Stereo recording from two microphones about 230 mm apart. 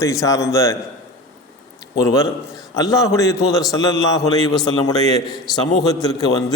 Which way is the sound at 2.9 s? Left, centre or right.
Centre.